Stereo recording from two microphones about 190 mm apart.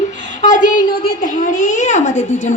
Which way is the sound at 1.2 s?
40° left (ahead or behind).